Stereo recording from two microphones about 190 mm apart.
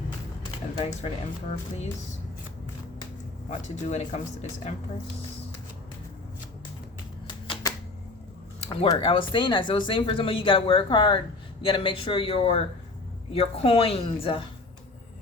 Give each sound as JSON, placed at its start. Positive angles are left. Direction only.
{"t": 0.8, "sound": "a woman's voice", "side_deg": 35}
{"t": 3.5, "sound": "a woman's voice", "side_deg": 35}
{"t": 7.4, "sound": "typewriter", "side_deg": 25}
{"t": 8.8, "sound": "a woman's voice", "side_deg": 30}